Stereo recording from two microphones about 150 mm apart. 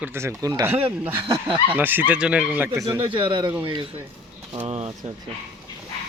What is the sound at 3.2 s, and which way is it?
Speech, 35° right (ahead or behind).